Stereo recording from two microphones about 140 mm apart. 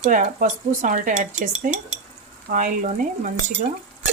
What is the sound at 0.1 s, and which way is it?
Speech, 65° right (ahead or behind).